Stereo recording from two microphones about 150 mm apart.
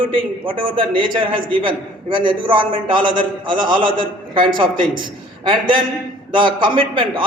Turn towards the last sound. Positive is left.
turn(degrees=-35)  # may be behind; listen again after turning